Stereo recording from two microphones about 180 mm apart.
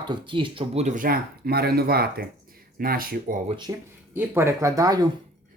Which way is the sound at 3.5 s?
25° right (ahead or behind).